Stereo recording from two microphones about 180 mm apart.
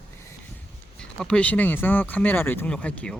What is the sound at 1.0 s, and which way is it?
Speech, 5° left (ahead or behind).